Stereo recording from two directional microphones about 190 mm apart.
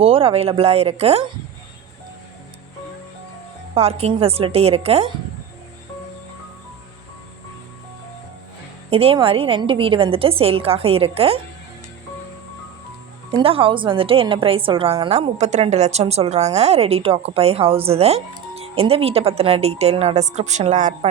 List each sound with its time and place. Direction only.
0.0 s a woman's voice: 30° right (ahead or behind)
3.8 s a woman's voice: 35° right (ahead or behind)
8.9 s a woman's voice: 30° right (ahead or behind)
13.3 s a woman's voice: 30° right (ahead or behind)